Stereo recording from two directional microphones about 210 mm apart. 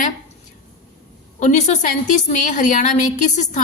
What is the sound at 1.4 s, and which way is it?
A woman's voice, 35° left (ahead or behind).